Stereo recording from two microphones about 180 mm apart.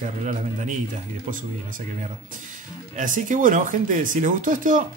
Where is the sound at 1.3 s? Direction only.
45° right (ahead or behind).